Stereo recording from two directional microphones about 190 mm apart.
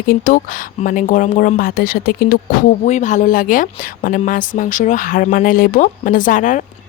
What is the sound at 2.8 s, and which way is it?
Speech, 40° left (ahead or behind).